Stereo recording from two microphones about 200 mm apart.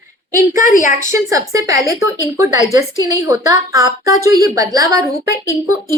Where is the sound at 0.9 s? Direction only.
15° right (ahead or behind).